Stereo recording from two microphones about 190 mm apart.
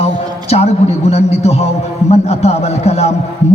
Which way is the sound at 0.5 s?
35° left (ahead or behind).